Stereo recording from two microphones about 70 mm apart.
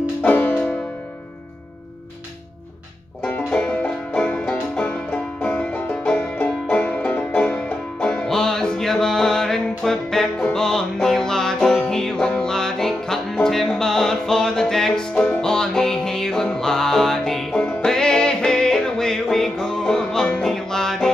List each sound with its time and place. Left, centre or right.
0.2 s music: left
3.3 s music: centre